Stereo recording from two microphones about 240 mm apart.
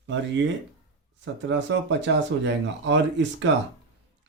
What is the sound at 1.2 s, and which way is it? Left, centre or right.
Speech, right.